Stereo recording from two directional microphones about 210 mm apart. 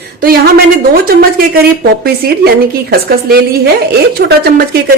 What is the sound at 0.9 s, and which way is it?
A woman's voice, 45° right (ahead or behind).